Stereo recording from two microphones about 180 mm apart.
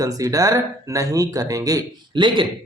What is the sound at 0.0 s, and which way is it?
Speech, 20° right (ahead or behind).